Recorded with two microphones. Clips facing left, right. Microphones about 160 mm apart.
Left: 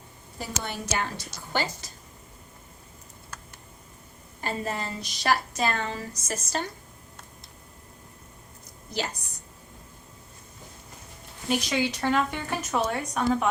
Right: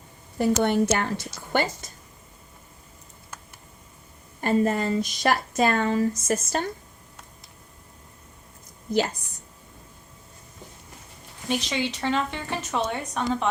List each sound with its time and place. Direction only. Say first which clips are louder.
0.3 s a woman's voice: right 14 dB; 60° right (ahead or behind)
4.4 s speech: right 9 dB; 50° right (ahead or behind)
11.4 s speech: left 1 dB; 10° left (ahead or behind)